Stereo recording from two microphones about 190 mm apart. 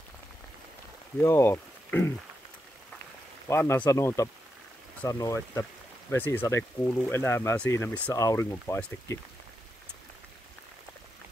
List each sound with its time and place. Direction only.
1.2 s speech: 15° left (ahead or behind)
3.4 s speech: 15° left (ahead or behind)